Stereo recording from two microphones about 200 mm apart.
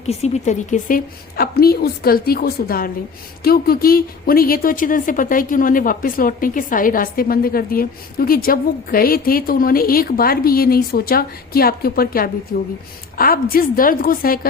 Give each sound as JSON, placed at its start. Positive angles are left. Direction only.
{"t": 0.0, "sound": "a woman's voice", "side_deg": 35}